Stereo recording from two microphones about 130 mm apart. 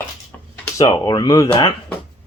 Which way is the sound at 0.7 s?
30° left (ahead or behind).